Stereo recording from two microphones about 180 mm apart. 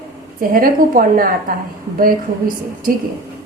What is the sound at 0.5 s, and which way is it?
A woman's voice, 50° right (ahead or behind).